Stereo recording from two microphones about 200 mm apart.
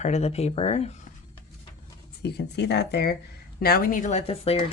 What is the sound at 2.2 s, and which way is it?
Speech, 55° left (ahead or behind).